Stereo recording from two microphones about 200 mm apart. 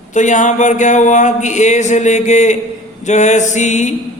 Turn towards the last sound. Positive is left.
turn(degrees=35)  # may be behind; listen again after turning